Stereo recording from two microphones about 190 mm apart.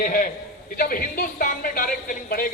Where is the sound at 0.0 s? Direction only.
45° left (ahead or behind).